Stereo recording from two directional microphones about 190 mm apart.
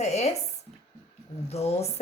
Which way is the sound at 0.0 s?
35° left (ahead or behind).